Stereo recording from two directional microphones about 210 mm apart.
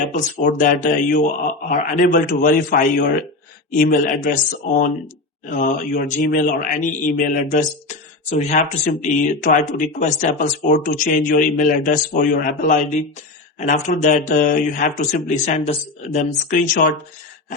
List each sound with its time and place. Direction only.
0.0 s speech: 35° left (ahead or behind)
5.5 s speech: 40° left (ahead or behind)